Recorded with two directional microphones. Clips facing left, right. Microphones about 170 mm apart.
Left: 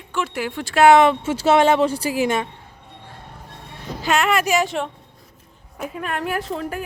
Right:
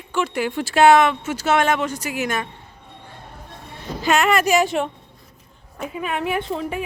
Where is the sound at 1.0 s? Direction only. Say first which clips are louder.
Left 3 dB; 30° left (ahead or behind).